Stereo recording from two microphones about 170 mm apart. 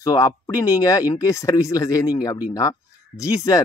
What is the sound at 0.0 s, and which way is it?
Speech, 20° left (ahead or behind).